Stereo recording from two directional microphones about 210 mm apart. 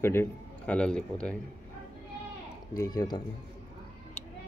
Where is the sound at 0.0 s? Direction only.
10° left (ahead or behind).